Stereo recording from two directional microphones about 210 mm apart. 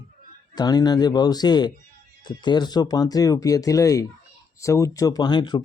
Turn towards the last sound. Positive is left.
turn(degrees=20)  # may be behind; listen again after turning